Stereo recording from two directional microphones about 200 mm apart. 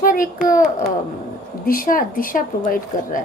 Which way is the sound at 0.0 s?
45° left (ahead or behind).